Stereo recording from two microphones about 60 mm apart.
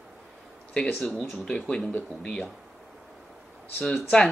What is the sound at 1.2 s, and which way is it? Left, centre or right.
Speech, centre.